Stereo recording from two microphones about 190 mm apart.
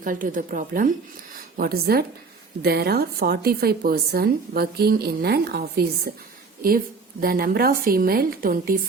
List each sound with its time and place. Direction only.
0.0 s a woman's voice: 45° right (ahead or behind)